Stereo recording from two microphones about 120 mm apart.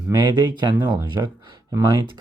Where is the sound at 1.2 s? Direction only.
25° right (ahead or behind).